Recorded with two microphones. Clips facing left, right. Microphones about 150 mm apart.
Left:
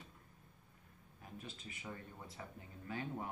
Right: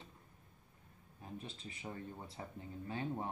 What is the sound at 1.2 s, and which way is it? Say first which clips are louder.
Speech: right 3 dB; 30° right (ahead or behind).